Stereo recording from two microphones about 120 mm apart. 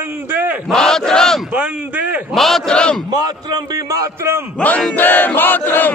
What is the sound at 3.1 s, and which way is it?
A man's voice, 30° right (ahead or behind).